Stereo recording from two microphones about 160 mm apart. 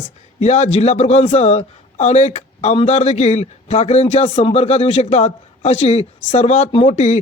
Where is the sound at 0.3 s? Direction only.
45° left (ahead or behind).